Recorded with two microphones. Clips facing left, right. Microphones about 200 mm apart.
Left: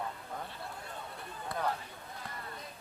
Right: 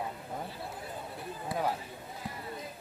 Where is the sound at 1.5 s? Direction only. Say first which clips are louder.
Right 2 dB; 10° right (ahead or behind).